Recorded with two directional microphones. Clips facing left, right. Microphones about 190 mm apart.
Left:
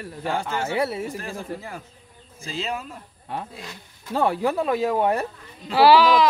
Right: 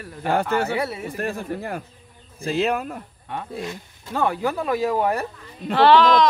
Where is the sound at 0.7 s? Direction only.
25° left (ahead or behind).